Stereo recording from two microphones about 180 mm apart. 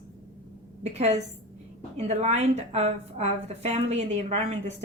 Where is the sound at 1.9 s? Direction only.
40° right (ahead or behind).